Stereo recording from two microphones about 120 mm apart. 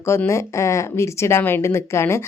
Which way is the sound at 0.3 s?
25° left (ahead or behind).